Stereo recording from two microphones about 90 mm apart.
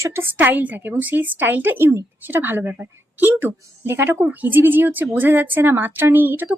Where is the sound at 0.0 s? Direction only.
30° right (ahead or behind).